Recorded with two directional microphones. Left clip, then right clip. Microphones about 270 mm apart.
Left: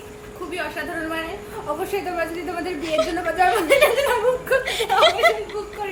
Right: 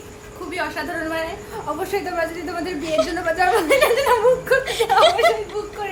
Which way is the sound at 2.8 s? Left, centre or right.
Centre.